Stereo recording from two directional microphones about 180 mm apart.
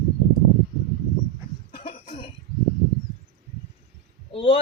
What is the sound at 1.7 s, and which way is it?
Cough, 35° left (ahead or behind).